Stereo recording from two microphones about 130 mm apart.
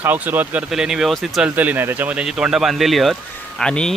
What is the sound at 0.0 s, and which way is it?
Speech, 15° right (ahead or behind).